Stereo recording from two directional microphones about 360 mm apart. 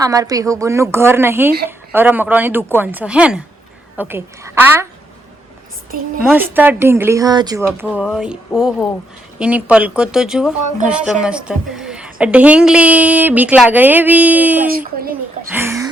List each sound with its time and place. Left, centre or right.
0.0 s a woman's voice: centre
6.2 s a woman's voice: centre
14.7 s speech: right
15.5 s a woman's voice: centre